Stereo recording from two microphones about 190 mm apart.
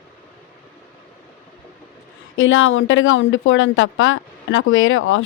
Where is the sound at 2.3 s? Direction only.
90° left.